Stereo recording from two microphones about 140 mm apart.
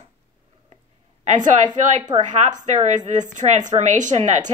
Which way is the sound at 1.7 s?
30° right (ahead or behind).